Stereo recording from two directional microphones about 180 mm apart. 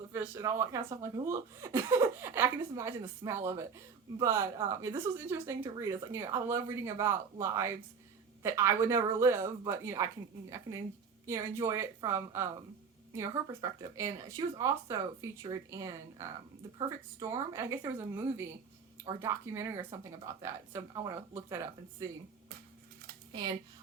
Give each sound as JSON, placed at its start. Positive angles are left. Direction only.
{"t": 0.1, "sound": "a woman's voice", "side_deg": -15}
{"t": 11.3, "sound": "a woman's voice", "side_deg": -15}
{"t": 23.3, "sound": "speech", "side_deg": -25}